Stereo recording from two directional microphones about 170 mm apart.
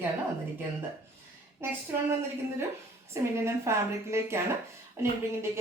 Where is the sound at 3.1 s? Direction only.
15° right (ahead or behind).